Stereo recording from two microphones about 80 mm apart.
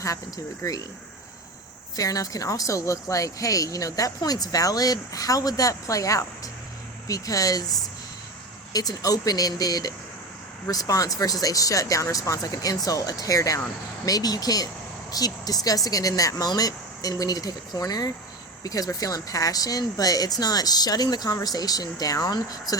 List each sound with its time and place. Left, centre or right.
0.6 s speech: left
2.0 s speech: left